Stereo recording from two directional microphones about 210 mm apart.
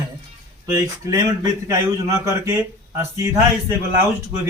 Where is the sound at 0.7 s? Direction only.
15° right (ahead or behind).